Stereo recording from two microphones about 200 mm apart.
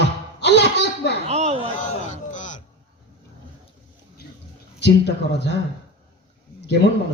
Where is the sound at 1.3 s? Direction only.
35° right (ahead or behind).